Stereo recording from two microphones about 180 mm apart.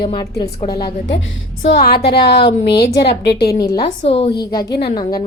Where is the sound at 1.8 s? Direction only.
60° left (ahead or behind).